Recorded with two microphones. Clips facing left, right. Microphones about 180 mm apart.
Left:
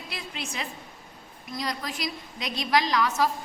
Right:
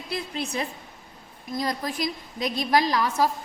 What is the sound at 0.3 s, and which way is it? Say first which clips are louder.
Speech: right 5 dB; 40° right (ahead or behind).